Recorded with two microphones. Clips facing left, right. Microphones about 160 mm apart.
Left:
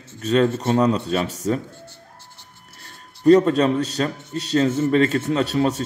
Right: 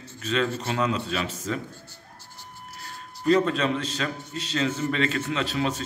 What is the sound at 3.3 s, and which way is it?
A man's voice, 40° left (ahead or behind).